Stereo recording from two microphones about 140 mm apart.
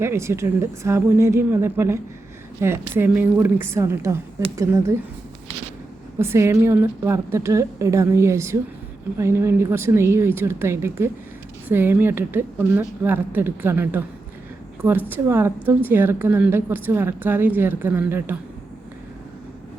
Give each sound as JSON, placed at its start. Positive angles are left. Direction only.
{"t": 0.0, "sound": "a woman's voice", "side_deg": -20}
{"t": 6.1, "sound": "a woman's voice", "side_deg": -20}